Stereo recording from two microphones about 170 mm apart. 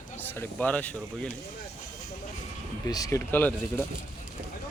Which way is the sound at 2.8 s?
20° left (ahead or behind).